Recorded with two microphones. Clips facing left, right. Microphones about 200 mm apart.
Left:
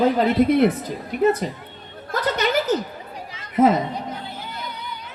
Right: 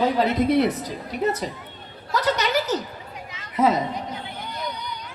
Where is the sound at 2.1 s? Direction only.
50° left (ahead or behind).